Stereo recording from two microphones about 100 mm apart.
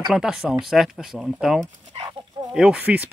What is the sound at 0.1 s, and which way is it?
Speech, 5° right (ahead or behind).